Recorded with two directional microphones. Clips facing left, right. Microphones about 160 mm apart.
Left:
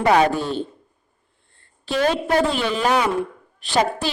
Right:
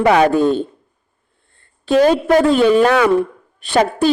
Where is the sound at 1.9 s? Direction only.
45° right (ahead or behind).